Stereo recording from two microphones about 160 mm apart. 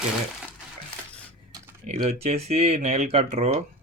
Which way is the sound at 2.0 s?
40° right (ahead or behind).